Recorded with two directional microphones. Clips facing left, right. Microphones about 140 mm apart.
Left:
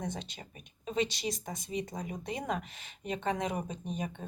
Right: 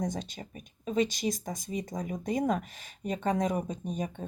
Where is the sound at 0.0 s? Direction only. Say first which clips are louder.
Right 5 dB; 40° right (ahead or behind).